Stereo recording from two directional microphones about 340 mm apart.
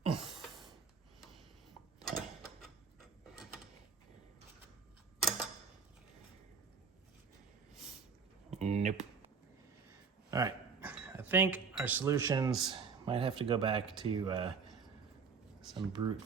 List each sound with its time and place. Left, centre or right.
0.1 s a sound: centre
2.0 s mechanisms: centre
8.4 s a sound: centre
10.3 s chink: centre
13.1 s speech: centre
15.7 s speech: centre